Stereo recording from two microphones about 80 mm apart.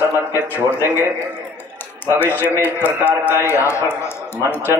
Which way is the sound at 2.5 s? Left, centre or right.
Left.